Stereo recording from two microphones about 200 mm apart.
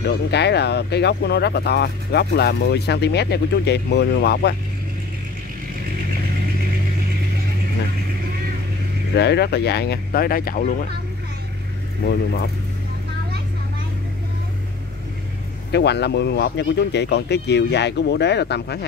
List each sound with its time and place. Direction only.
0.0 s speech: 55° left (ahead or behind)
9.1 s speech: 55° left (ahead or behind)
15.7 s speech: 55° left (ahead or behind)